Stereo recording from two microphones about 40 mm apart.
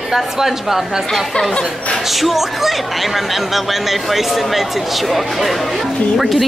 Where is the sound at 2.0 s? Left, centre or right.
Centre.